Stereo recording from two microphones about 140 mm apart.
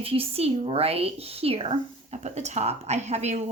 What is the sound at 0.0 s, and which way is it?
Speech, 40° right (ahead or behind).